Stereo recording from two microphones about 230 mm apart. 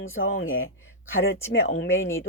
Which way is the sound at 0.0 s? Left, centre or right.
Left.